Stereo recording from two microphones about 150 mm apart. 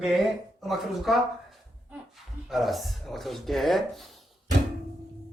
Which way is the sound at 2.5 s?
Centre (ahead or behind).